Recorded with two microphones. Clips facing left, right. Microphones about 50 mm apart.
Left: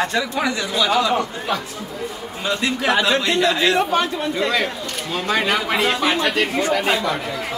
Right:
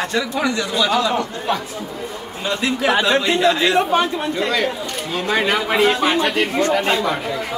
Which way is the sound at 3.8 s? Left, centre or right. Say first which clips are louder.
Right 2 dB; centre.